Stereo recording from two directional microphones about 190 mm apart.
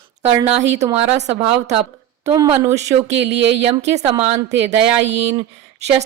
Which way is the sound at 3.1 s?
70° right (ahead or behind).